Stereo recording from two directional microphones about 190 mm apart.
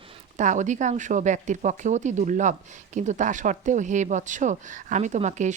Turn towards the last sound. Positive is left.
turn(degrees=-40)  # may be behind; listen again after turning